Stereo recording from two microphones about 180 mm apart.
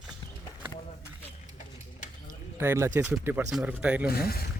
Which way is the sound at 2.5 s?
15° right (ahead or behind).